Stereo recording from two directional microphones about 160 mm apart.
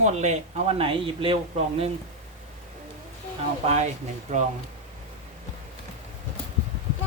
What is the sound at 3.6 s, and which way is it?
Speech, 40° right (ahead or behind).